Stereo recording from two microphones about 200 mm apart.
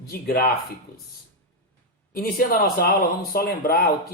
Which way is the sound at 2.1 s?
50° left (ahead or behind).